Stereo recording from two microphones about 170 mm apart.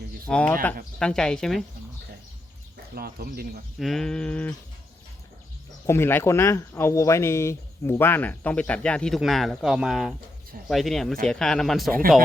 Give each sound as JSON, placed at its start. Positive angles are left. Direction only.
{"t": 0.3, "sound": "speech", "side_deg": 5}
{"t": 2.9, "sound": "speech", "side_deg": -65}
{"t": 3.8, "sound": "speech", "side_deg": 0}
{"t": 5.8, "sound": "speech", "side_deg": 15}